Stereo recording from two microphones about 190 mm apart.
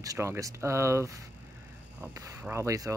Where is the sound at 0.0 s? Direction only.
15° right (ahead or behind).